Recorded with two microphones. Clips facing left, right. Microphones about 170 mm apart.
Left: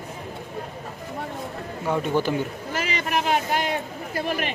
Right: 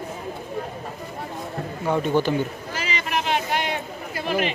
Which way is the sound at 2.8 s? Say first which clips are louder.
Left 1 dB; 50° left (ahead or behind).